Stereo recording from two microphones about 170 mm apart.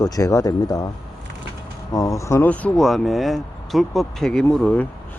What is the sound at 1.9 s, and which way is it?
Speech, 20° left (ahead or behind).